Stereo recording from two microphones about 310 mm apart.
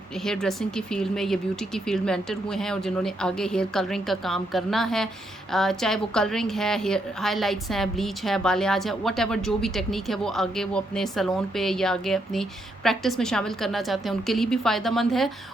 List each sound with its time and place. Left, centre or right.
0.3 s a woman's voice: centre